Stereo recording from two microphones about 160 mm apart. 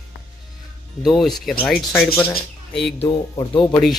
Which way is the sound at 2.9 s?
30° left (ahead or behind).